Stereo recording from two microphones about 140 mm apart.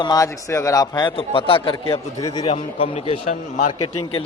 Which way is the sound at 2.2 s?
30° left (ahead or behind).